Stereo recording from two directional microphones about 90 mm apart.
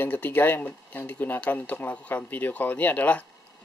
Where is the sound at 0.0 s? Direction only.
20° left (ahead or behind).